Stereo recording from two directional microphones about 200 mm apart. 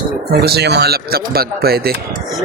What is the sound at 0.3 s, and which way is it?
Speech, 55° right (ahead or behind).